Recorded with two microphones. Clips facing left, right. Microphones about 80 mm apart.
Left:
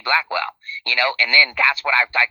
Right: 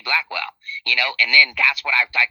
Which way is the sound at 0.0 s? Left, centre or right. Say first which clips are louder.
Left 4 dB; left.